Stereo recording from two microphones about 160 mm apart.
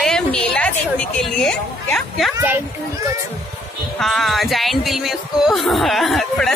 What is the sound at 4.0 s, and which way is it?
A woman's voice, centre (ahead or behind).